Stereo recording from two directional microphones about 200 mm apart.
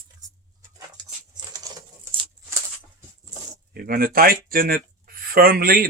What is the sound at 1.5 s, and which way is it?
Patter, 15° right (ahead or behind).